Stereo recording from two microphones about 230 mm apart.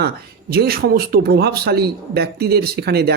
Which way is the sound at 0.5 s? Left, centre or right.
Right.